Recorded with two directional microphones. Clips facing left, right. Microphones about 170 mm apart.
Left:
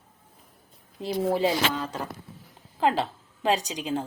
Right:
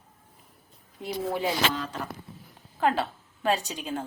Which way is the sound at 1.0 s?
25° left (ahead or behind).